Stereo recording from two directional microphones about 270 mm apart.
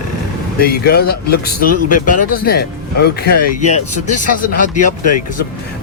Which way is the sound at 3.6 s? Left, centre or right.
Left.